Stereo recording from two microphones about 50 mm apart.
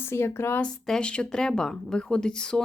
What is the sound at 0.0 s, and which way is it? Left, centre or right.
Speech, left.